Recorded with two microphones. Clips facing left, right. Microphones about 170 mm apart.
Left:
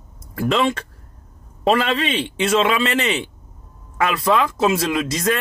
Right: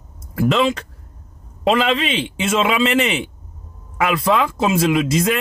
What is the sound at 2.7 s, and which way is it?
Speech, centre (ahead or behind).